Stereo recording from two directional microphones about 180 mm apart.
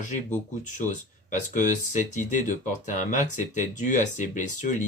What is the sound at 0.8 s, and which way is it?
Speech, 45° left (ahead or behind).